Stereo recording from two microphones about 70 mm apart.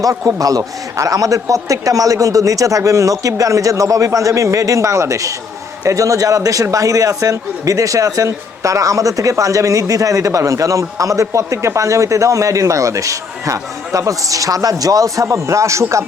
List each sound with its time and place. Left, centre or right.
0.0 s a man's voice: right